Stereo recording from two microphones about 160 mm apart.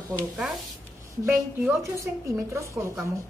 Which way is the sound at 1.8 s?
20° right (ahead or behind).